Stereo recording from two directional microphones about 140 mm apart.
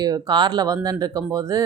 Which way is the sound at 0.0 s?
30° right (ahead or behind).